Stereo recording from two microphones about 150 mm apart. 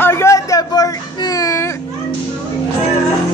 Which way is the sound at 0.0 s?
20° left (ahead or behind).